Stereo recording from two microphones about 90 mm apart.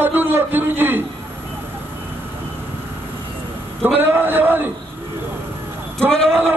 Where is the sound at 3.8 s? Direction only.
20° right (ahead or behind).